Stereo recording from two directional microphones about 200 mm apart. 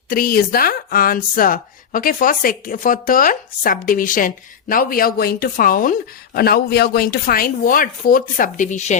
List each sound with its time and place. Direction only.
0.1 s speech: 45° left (ahead or behind)